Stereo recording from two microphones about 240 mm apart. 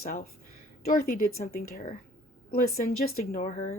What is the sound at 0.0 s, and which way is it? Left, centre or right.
Speech, left.